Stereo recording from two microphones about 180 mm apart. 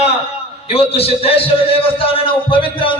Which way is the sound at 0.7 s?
35° left (ahead or behind).